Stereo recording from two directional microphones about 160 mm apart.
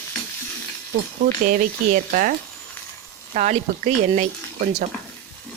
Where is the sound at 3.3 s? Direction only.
45° right (ahead or behind).